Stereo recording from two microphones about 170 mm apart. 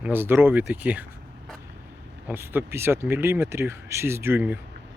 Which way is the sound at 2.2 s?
10° right (ahead or behind).